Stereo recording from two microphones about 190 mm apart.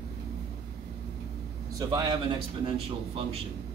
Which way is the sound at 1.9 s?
25° right (ahead or behind).